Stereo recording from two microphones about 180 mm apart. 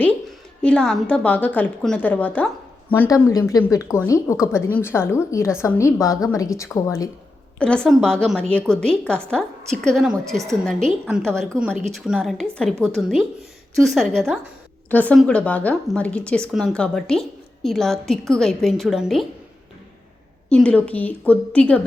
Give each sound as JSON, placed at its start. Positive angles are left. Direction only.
{"t": 0.6, "sound": "a woman's voice", "side_deg": 5}
{"t": 7.6, "sound": "a woman's voice", "side_deg": 5}
{"t": 20.5, "sound": "a woman's voice", "side_deg": 5}